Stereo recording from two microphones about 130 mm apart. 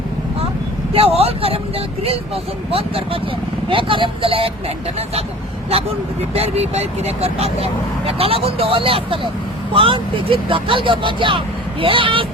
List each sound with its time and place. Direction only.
0.9 s speech: 50° right (ahead or behind)
6.3 s speech: 55° right (ahead or behind)